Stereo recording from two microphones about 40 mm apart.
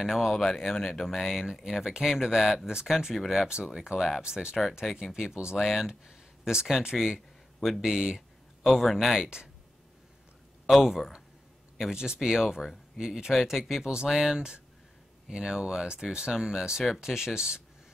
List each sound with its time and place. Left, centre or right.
0.0 s speech: centre
0.5 s speech: centre
5.6 s speech: centre
5.9 s speech: centre
8.7 s speech: centre
9.2 s speech: centre
10.7 s speech: centre
11.9 s speech: centre